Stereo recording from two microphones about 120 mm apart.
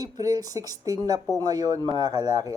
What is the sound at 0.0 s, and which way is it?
Speech, 30° right (ahead or behind).